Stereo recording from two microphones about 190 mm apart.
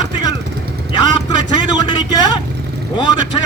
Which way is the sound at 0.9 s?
20° left (ahead or behind).